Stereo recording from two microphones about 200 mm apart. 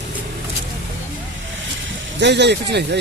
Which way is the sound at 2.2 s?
60° right (ahead or behind).